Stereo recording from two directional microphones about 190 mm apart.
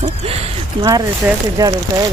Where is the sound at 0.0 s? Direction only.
30° right (ahead or behind).